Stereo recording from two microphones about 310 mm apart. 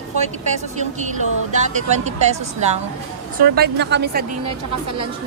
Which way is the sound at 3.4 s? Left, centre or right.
Right.